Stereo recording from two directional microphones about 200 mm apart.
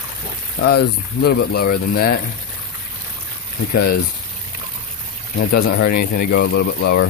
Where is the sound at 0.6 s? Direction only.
55° left (ahead or behind).